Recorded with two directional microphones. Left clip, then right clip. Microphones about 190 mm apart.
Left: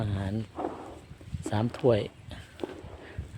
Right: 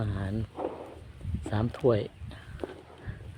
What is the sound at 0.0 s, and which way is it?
Wild animals, 5° left (ahead or behind).